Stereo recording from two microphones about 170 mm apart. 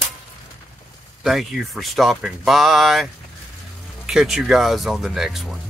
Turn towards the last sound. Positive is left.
turn(degrees=0)  # may be behind; listen again after turning